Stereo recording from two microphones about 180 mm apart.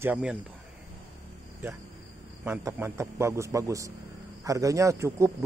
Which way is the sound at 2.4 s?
15° right (ahead or behind).